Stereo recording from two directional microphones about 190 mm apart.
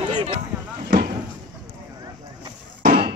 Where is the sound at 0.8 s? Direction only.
45° right (ahead or behind).